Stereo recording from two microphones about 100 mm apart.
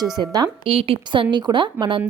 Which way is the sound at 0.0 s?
40° right (ahead or behind).